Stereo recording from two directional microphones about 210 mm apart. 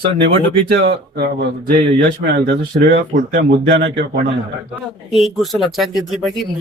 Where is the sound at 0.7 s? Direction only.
50° right (ahead or behind).